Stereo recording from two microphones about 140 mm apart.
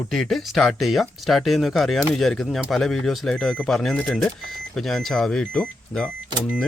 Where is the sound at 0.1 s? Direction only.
Centre (ahead or behind).